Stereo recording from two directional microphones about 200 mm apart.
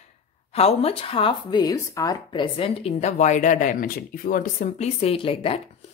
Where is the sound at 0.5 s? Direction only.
30° left (ahead or behind).